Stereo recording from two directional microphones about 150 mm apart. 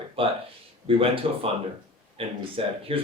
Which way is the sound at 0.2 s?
35° right (ahead or behind).